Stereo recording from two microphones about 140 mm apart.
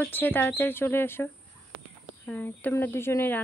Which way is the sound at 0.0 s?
15° left (ahead or behind).